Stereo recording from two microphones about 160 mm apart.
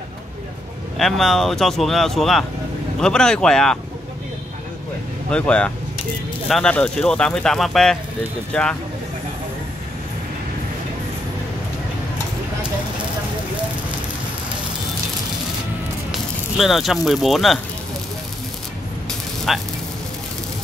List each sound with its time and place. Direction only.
0.9 s speech: centre (ahead or behind)
5.3 s speech: 5° left (ahead or behind)
16.1 s speech: centre (ahead or behind)
19.0 s a sound: centre (ahead or behind)